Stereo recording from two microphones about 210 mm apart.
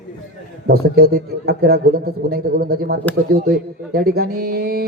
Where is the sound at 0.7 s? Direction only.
45° right (ahead or behind).